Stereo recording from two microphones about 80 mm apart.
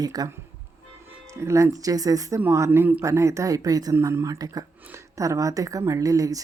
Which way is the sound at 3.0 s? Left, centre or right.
Right.